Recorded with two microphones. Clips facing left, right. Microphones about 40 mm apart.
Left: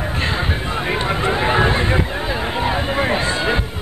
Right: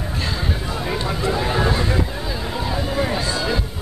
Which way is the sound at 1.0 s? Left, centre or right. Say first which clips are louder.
Left 4 dB; left.